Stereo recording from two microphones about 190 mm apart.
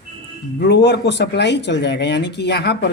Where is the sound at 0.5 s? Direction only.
65° left (ahead or behind).